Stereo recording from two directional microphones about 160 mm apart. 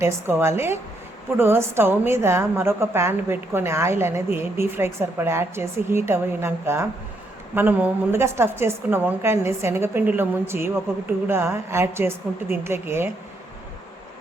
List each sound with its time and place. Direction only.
0.0 s a woman's voice: 15° right (ahead or behind)